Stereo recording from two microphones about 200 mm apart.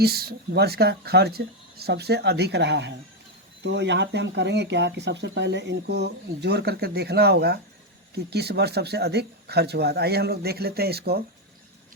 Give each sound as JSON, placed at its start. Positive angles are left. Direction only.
{"t": 0.0, "sound": "speech", "side_deg": -50}